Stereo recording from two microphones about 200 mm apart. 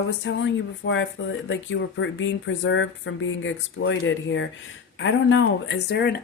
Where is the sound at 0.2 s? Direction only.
65° left (ahead or behind).